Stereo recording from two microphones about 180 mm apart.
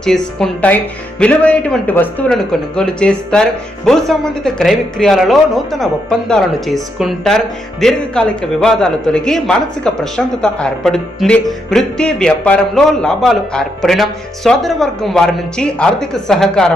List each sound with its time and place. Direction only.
0.0 s speech: centre (ahead or behind)